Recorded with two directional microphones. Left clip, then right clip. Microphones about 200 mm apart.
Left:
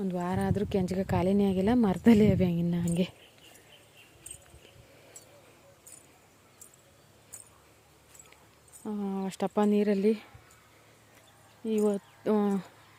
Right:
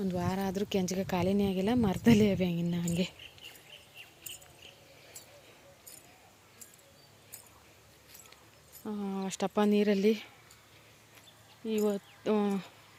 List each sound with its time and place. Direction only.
0.0 s speech: 5° left (ahead or behind)
0.3 s speech: 15° left (ahead or behind)
8.8 s speech: 15° left (ahead or behind)
11.6 s speech: 20° left (ahead or behind)